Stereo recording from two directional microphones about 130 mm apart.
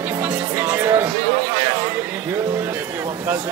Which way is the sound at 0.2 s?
15° right (ahead or behind).